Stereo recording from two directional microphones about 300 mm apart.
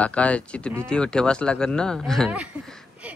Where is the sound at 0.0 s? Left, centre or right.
Centre.